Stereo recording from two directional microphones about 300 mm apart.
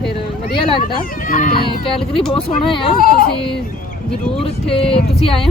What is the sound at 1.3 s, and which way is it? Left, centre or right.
Speech, left.